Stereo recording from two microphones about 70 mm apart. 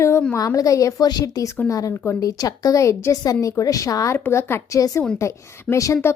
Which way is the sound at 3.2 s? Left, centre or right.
Left.